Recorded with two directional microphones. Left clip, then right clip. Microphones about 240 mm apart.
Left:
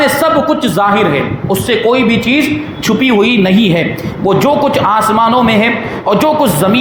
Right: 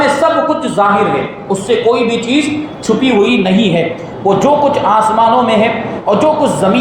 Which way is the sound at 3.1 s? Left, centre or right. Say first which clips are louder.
Even; left.